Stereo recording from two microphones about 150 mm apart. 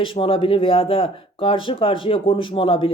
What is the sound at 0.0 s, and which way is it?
Speech, 35° left (ahead or behind).